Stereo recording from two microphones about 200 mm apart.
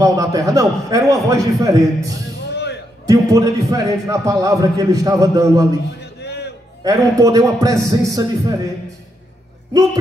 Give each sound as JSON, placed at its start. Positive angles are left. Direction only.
{"t": 0.0, "sound": "a man's voice", "side_deg": -15}
{"t": 2.5, "sound": "music", "side_deg": 55}
{"t": 3.1, "sound": "a man's voice", "side_deg": -15}
{"t": 6.2, "sound": "music", "side_deg": 55}
{"t": 6.8, "sound": "a man's voice", "side_deg": -15}